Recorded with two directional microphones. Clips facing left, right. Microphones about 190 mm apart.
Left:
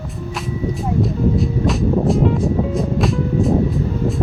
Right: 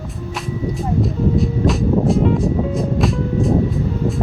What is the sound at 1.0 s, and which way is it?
Music, centre (ahead or behind).